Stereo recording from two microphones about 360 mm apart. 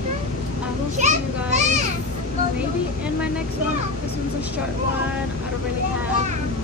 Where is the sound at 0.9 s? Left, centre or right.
Centre.